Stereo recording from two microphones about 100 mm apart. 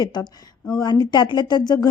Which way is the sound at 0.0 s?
45° left (ahead or behind).